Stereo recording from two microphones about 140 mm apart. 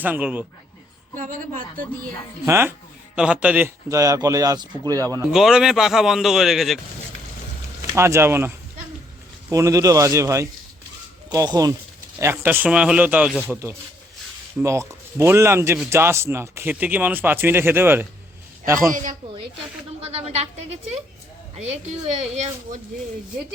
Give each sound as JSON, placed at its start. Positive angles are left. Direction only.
{"t": 0.0, "sound": "speech", "side_deg": -10}
{"t": 1.1, "sound": "a woman's voice", "side_deg": -70}
{"t": 2.5, "sound": "speech", "side_deg": -15}
{"t": 3.8, "sound": "speech", "side_deg": -25}
{"t": 5.3, "sound": "a man's voice", "side_deg": -5}
{"t": 7.9, "sound": "speech", "side_deg": -20}
{"t": 12.2, "sound": "speech", "side_deg": -15}
{"t": 20.2, "sound": "speech", "side_deg": -50}
{"t": 22.3, "sound": "speech", "side_deg": -50}